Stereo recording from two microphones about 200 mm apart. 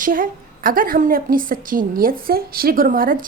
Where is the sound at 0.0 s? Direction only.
45° right (ahead or behind).